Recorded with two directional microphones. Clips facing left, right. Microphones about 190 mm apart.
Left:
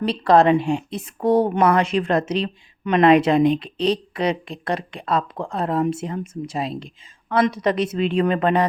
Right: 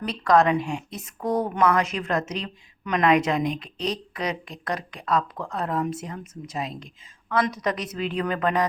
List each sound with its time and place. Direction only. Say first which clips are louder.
0.0 s a woman's voice: left 4 dB; 30° left (ahead or behind)